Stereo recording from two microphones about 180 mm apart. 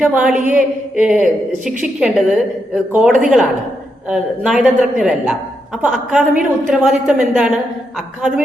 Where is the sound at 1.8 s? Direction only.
5° right (ahead or behind).